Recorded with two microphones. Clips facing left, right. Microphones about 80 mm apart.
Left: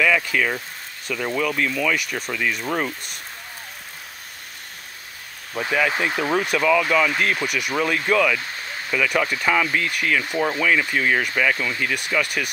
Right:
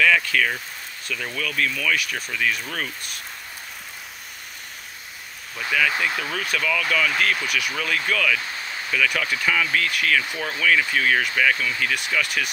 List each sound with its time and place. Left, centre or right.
0.0 s speech: centre
5.6 s speech: left